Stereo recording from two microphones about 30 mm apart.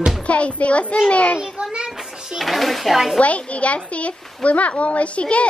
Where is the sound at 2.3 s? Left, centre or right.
Centre.